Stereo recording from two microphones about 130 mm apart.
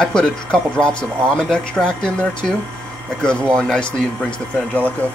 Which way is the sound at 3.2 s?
5° left (ahead or behind).